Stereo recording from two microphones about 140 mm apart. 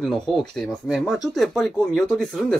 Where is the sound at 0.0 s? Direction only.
Centre (ahead or behind).